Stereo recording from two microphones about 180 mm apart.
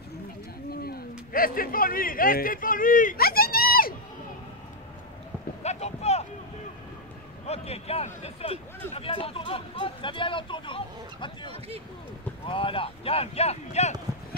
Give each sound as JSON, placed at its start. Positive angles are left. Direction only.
{"t": 0.7, "sound": "speech", "side_deg": 60}
{"t": 5.6, "sound": "a sound", "side_deg": 35}
{"t": 7.4, "sound": "speech", "side_deg": 35}